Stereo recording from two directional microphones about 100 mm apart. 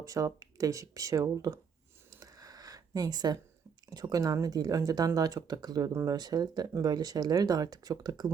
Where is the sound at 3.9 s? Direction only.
40° right (ahead or behind).